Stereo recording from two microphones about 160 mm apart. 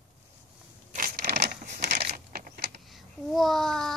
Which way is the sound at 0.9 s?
60° right (ahead or behind).